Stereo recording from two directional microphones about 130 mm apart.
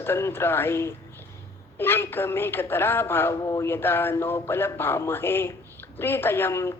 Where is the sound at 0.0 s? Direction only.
20° left (ahead or behind).